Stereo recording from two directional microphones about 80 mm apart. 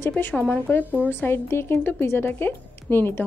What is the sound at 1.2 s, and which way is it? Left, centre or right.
A woman's voice, left.